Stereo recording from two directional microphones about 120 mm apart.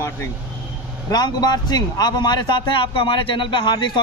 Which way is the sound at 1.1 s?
35° left (ahead or behind).